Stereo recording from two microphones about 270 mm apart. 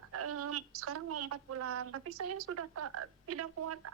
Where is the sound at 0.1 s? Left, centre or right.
Right.